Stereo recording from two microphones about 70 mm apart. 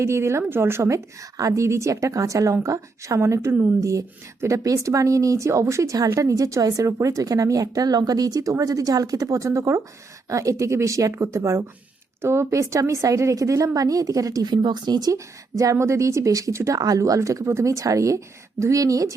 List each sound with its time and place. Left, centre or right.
0.0 s speech: right
10.2 s speech: right
16.7 s speech: right